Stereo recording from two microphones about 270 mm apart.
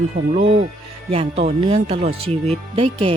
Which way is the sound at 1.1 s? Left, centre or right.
Right.